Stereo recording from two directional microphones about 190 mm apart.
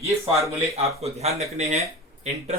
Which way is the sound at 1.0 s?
35° right (ahead or behind).